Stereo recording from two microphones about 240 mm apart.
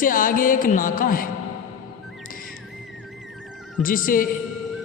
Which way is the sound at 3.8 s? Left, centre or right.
Left.